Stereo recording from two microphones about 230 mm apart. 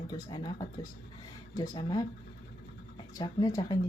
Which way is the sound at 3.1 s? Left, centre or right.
Centre.